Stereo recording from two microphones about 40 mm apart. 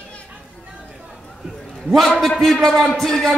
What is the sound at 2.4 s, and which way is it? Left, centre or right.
Speech, centre.